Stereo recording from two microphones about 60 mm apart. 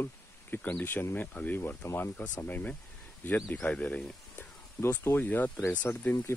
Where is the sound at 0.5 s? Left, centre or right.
Left.